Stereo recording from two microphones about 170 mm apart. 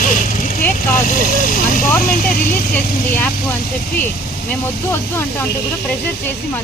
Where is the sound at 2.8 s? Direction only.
10° left (ahead or behind).